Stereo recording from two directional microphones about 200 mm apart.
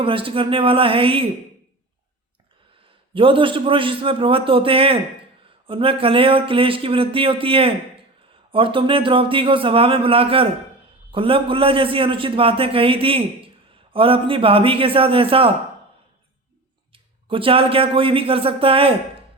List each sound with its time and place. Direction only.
0.0 s a man's voice: 25° right (ahead or behind)
3.2 s a man's voice: 25° right (ahead or behind)
16.9 s a man's voice: 25° right (ahead or behind)